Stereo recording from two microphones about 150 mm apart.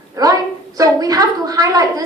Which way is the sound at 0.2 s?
25° right (ahead or behind).